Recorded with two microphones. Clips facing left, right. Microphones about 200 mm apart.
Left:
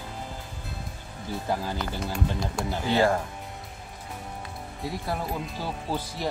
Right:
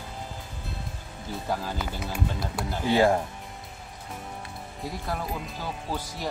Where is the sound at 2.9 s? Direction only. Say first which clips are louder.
Right 2 dB; 15° right (ahead or behind).